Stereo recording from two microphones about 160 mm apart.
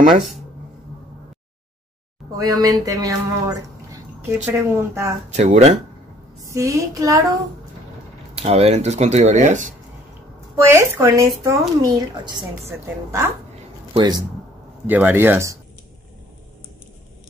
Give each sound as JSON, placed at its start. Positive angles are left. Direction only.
{"t": 2.3, "sound": "speech", "side_deg": -25}
{"t": 5.3, "sound": "speech", "side_deg": -45}
{"t": 6.4, "sound": "a woman's voice", "side_deg": -20}
{"t": 8.4, "sound": "speech", "side_deg": -40}
{"t": 10.6, "sound": "a woman's voice", "side_deg": -15}
{"t": 14.9, "sound": "speech", "side_deg": -10}